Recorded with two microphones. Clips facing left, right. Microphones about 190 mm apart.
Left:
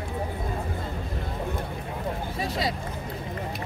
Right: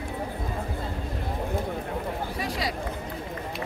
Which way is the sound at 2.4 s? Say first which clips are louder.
Left 3 dB; 25° left (ahead or behind).